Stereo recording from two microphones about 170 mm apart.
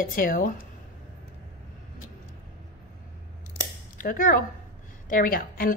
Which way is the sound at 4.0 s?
55° left (ahead or behind).